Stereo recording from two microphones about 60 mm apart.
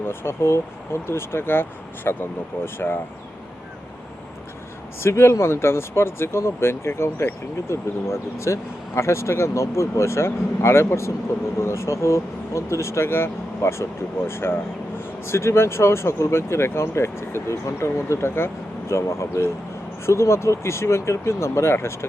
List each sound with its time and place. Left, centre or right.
0.0 s speech: left
4.9 s speech: left